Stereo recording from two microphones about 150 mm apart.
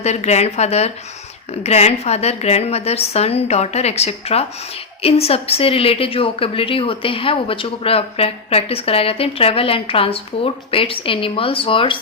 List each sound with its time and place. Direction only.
0.0 s a woman's voice: 45° left (ahead or behind)